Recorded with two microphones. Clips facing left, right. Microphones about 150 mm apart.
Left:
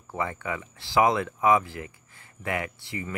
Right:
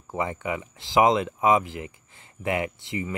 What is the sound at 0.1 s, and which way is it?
Speech, 20° right (ahead or behind).